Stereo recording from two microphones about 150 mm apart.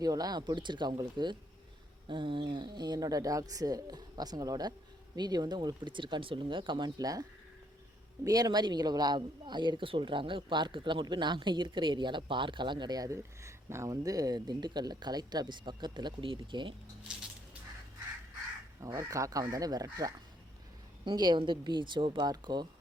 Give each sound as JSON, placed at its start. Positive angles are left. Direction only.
{"t": 0.0, "sound": "speech", "side_deg": -25}
{"t": 17.1, "sound": "a sound", "side_deg": -5}
{"t": 18.8, "sound": "speech", "side_deg": -20}